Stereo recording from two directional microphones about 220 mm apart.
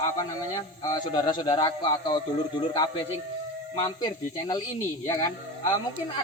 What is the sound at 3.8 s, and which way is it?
Speech, 20° left (ahead or behind).